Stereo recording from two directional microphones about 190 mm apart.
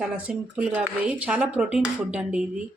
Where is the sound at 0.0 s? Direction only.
5° right (ahead or behind).